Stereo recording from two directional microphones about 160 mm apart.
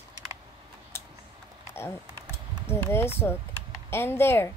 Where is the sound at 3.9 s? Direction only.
15° left (ahead or behind).